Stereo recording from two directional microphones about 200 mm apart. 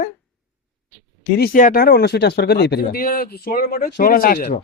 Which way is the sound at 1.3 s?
45° left (ahead or behind).